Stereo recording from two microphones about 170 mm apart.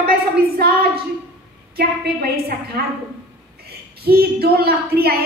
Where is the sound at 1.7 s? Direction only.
65° right (ahead or behind).